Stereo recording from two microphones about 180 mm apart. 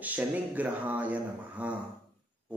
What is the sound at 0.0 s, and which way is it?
A man's voice, 10° right (ahead or behind).